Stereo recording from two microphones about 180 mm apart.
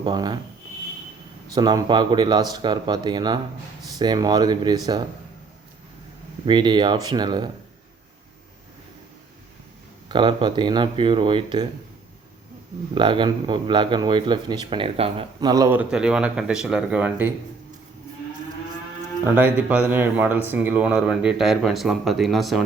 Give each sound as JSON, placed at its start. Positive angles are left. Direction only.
{"t": 0.0, "sound": "speech", "side_deg": -25}
{"t": 1.5, "sound": "speech", "side_deg": -25}
{"t": 6.4, "sound": "speech", "side_deg": -25}
{"t": 10.1, "sound": "speech", "side_deg": -25}
{"t": 12.9, "sound": "speech", "side_deg": -25}
{"t": 19.4, "sound": "speech", "side_deg": -10}